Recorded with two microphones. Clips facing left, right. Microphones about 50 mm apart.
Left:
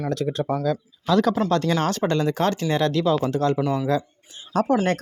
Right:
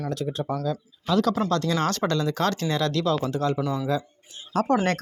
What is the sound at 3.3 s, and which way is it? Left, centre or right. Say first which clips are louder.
Speech: left 4 dB; left.